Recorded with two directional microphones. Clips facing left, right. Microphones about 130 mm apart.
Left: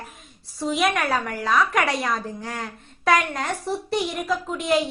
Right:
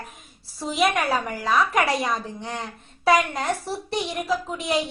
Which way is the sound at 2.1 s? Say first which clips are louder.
Even; 25° right (ahead or behind).